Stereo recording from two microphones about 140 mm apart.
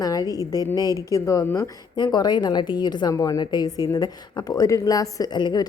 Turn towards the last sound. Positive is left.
turn(degrees=30)  # may be behind; listen again after turning